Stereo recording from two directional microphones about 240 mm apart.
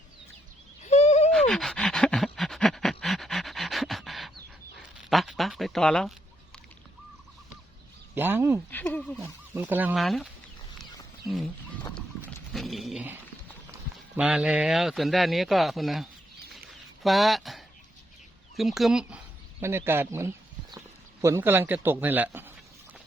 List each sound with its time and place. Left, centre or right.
0.8 s a sound: left
1.3 s pant: centre
5.0 s a sound: centre
8.1 s speech: centre
8.7 s speech: centre
9.2 s speech: centre
11.3 s speech: centre
12.5 s dog: centre
14.2 s speech: centre